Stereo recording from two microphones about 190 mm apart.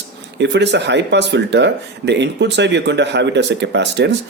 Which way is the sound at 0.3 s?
65° right (ahead or behind).